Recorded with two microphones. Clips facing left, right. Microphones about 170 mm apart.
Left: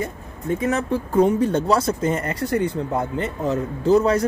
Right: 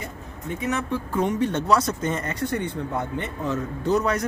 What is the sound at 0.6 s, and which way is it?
Speech, 35° left (ahead or behind).